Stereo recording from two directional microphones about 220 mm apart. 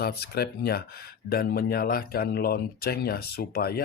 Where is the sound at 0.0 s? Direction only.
45° left (ahead or behind).